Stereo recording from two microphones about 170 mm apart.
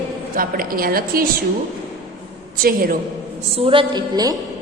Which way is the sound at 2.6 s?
60° right (ahead or behind).